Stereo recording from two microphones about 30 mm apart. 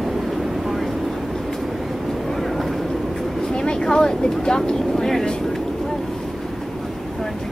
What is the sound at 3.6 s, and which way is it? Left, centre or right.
Vehicle, left.